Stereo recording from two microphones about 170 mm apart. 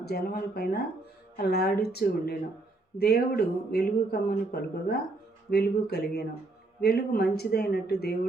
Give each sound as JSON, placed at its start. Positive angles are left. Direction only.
{"t": 0.0, "sound": "speech", "side_deg": 70}